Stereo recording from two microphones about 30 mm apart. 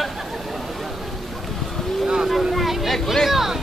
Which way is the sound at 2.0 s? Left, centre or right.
Centre.